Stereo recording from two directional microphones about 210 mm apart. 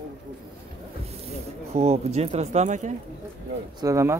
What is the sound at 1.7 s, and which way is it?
Speech, 30° right (ahead or behind).